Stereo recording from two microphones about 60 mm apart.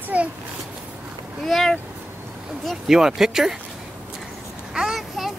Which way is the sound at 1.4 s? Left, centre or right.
Centre.